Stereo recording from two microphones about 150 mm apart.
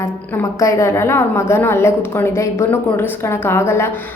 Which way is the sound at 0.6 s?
20° left (ahead or behind).